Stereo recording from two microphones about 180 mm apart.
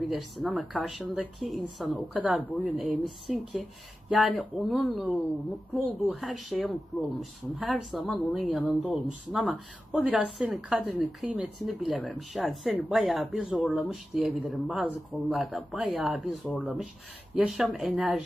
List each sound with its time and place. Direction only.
0.0 s speech: centre (ahead or behind)